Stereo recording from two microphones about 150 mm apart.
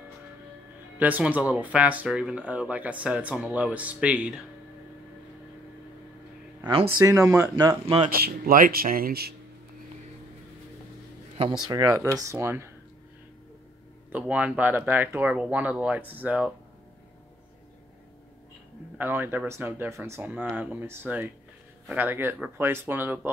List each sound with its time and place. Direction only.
0.9 s speech: 10° right (ahead or behind)
6.6 s speech: 35° right (ahead or behind)
7.0 s speech: 20° right (ahead or behind)
8.1 s speech: 75° right (ahead or behind)
11.7 s speech: 25° right (ahead or behind)
14.1 s speech: 10° right (ahead or behind)
18.9 s speech: 15° right (ahead or behind)